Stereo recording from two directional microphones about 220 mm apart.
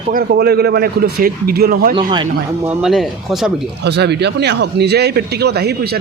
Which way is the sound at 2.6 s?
Centre (ahead or behind).